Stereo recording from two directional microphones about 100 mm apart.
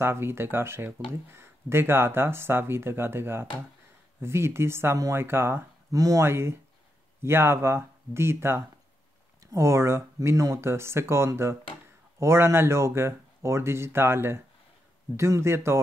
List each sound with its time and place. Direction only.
0.0 s speech: 25° right (ahead or behind)
5.9 s speech: 35° right (ahead or behind)
6.2 s speech: 25° right (ahead or behind)